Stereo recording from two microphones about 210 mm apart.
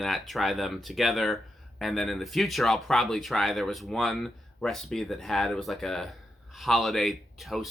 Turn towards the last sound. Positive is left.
turn(degrees=0)  # may be behind; listen again after turning